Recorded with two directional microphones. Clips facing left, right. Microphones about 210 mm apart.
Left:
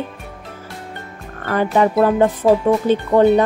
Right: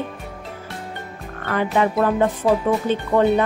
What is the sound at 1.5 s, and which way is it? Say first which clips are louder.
Speech: left 4 dB; 35° left (ahead or behind).